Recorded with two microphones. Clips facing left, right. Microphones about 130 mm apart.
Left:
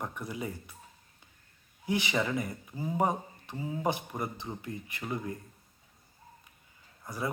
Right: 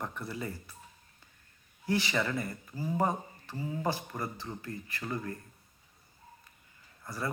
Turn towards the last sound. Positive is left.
turn(degrees=15)  # may be behind; listen again after turning